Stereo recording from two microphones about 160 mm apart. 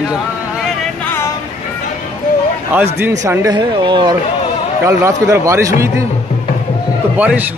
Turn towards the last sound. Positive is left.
turn(degrees=-10)  # may be behind; listen again after turning